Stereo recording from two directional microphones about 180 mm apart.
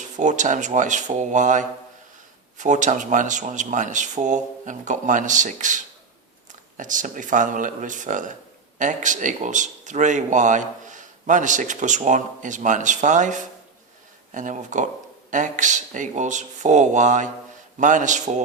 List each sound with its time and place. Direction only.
0.0 s speech: 40° right (ahead or behind)